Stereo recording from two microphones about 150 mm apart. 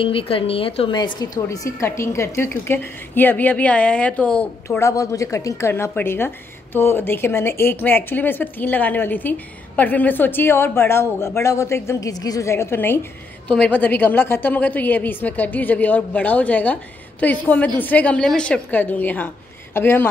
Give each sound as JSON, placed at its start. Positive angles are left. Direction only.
{"t": 0.0, "sound": "a woman's voice", "side_deg": 40}